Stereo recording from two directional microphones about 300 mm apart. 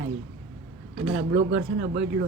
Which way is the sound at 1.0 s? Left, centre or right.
Right.